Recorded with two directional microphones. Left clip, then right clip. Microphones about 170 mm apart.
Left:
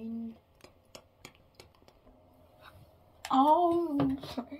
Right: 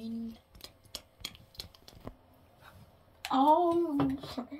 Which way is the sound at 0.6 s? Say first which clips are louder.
Right 7 dB; 25° left (ahead or behind).